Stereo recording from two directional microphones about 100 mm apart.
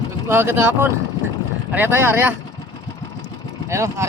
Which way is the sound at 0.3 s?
25° right (ahead or behind).